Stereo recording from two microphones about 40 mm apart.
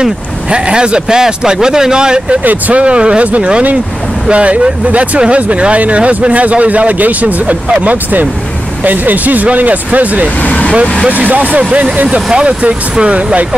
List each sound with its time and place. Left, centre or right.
0.0 s speech: right
10.4 s vehicle: left
11.1 s speech: right